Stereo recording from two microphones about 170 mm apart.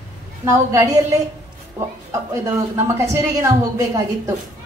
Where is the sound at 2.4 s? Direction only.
20° right (ahead or behind).